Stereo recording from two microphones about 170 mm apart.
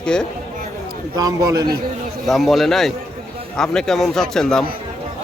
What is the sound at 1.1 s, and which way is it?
Speech, 20° right (ahead or behind).